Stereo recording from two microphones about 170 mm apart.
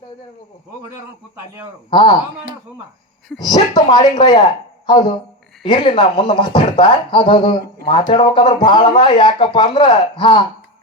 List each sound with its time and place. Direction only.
1.9 s speech: 30° left (ahead or behind)
3.4 s speech: 25° left (ahead or behind)